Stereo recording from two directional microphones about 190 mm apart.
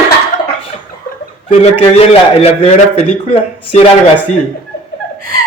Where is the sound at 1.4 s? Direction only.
30° left (ahead or behind).